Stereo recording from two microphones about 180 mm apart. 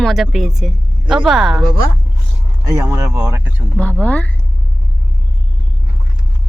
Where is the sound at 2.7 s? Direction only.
20° right (ahead or behind).